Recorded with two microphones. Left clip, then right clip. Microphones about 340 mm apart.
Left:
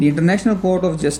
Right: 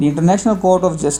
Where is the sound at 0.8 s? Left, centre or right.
Centre.